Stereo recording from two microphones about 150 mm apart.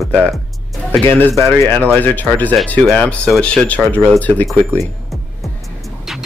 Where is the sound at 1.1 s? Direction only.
15° left (ahead or behind).